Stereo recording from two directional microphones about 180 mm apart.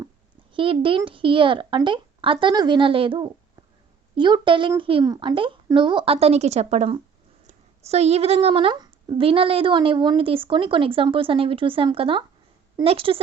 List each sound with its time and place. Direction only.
0.5 s a woman's voice: 30° right (ahead or behind)